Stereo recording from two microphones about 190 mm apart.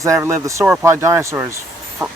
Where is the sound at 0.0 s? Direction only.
15° right (ahead or behind).